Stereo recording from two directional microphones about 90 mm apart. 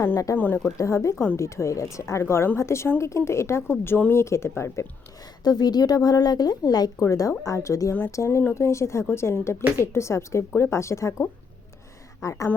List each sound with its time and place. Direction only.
0.3 s speech: 20° left (ahead or behind)
0.8 s a woman's voice: 35° left (ahead or behind)
5.4 s speech: 50° left (ahead or behind)
7.0 s a woman's voice: 35° left (ahead or behind)
12.2 s a woman's voice: 35° left (ahead or behind)